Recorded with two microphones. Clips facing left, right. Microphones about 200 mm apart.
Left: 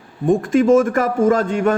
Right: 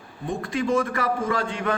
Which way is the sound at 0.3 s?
50° left (ahead or behind).